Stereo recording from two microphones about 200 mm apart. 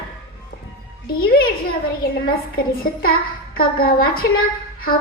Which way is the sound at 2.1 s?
50° left (ahead or behind).